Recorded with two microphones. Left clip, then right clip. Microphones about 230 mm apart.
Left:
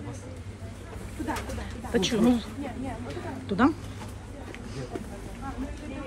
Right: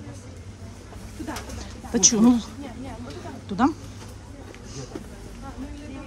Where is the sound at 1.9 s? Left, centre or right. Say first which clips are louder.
Right 5 dB; right.